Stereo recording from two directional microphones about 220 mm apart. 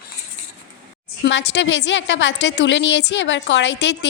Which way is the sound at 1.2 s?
50° left (ahead or behind).